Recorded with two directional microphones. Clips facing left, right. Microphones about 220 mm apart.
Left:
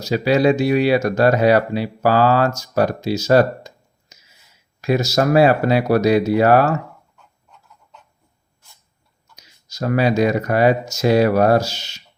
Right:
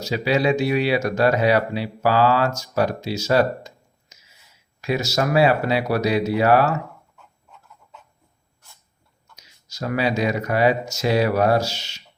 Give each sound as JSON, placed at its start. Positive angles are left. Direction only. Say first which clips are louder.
{"t": 0.0, "sound": "speech", "louder": "left 5 dB", "side_deg": 45}
{"t": 4.8, "sound": "speech", "louder": "left 5 dB", "side_deg": 45}
{"t": 7.2, "sound": "chicken", "louder": "right 1 dB", "side_deg": 0}
{"t": 9.3, "sound": "speech", "louder": "left 2 dB", "side_deg": 45}